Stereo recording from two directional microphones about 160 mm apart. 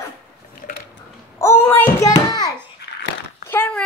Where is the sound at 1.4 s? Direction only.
15° left (ahead or behind).